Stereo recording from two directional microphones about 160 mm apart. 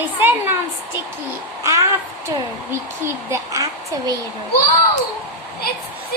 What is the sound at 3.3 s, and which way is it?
Speech, 20° right (ahead or behind).